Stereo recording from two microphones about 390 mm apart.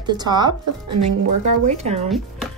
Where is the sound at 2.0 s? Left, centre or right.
Centre.